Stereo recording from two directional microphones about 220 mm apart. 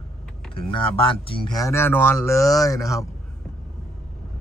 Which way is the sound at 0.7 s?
25° left (ahead or behind).